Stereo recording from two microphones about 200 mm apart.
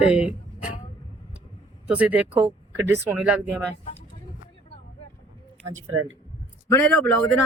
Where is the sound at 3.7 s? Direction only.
30° left (ahead or behind).